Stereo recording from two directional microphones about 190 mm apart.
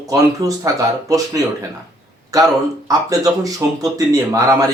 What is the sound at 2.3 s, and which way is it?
Speech, 20° right (ahead or behind).